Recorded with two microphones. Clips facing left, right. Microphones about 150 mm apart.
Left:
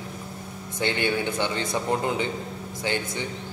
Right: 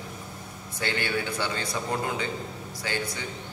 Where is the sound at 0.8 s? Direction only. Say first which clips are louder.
Left 4 dB; 20° left (ahead or behind).